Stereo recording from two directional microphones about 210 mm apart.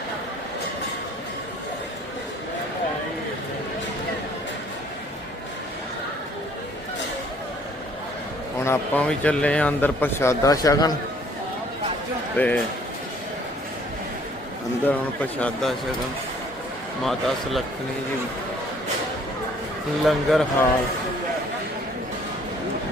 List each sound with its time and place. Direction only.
8.6 s a man's voice: 10° left (ahead or behind)
12.4 s a man's voice: 10° left (ahead or behind)
14.8 s a man's voice: 5° left (ahead or behind)
17.0 s a man's voice: centre (ahead or behind)
20.1 s a man's voice: centre (ahead or behind)